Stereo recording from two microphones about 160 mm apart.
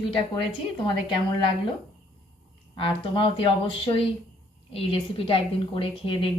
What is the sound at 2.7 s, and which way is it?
A woman's voice, 35° left (ahead or behind).